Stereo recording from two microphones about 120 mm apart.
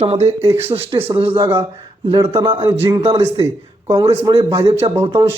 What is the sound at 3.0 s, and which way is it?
Speech, 55° right (ahead or behind).